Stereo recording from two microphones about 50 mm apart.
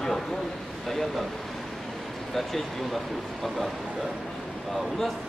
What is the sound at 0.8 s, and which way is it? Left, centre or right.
Speech, centre.